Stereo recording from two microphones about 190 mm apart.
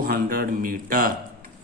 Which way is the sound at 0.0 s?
50° right (ahead or behind).